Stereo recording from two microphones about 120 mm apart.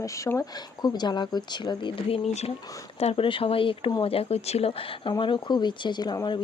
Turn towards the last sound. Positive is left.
turn(degrees=35)  # may be behind; listen again after turning